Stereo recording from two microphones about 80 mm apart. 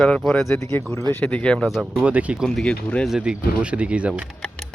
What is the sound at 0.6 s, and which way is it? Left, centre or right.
Speech, left.